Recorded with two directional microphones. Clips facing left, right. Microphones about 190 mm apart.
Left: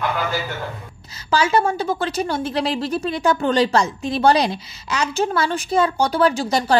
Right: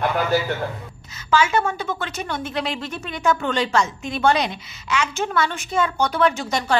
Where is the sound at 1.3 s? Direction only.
35° left (ahead or behind).